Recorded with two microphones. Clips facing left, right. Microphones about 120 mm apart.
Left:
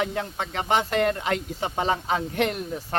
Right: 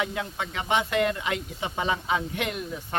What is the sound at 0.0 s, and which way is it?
A man's voice, 40° left (ahead or behind).